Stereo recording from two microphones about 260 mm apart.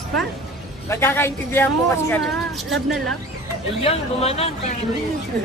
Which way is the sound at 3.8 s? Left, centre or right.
Left.